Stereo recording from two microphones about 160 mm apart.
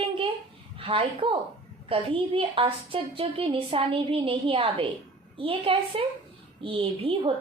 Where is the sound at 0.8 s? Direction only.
35° right (ahead or behind).